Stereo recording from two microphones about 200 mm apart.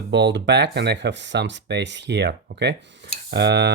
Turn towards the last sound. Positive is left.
turn(degrees=-55)  # may be behind; listen again after turning